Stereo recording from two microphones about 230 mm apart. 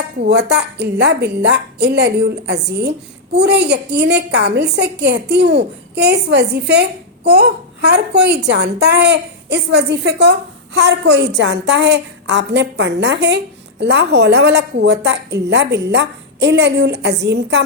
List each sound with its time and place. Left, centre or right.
0.2 s a woman's voice: right